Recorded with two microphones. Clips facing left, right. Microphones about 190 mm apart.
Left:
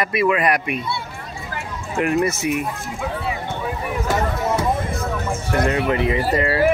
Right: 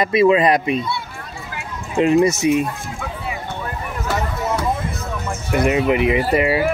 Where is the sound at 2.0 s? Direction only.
20° right (ahead or behind).